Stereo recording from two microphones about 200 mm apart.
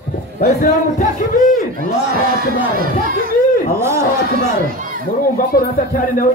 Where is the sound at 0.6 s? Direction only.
40° left (ahead or behind).